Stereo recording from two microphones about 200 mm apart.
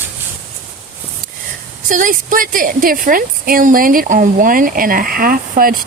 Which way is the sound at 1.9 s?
40° right (ahead or behind).